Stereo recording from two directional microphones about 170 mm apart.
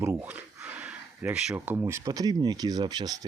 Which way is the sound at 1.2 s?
10° right (ahead or behind).